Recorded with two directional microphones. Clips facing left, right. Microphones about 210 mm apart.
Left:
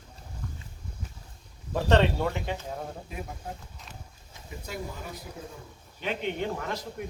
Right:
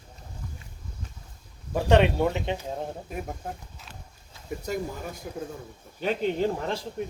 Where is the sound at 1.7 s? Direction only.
15° right (ahead or behind).